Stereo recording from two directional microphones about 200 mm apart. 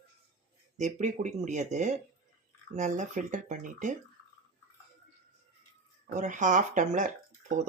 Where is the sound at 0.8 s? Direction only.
35° right (ahead or behind).